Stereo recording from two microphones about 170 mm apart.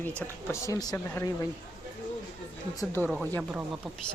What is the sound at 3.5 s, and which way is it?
Speech, 10° right (ahead or behind).